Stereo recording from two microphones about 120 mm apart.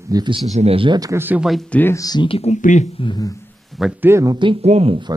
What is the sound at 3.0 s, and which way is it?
Speech, 40° left (ahead or behind).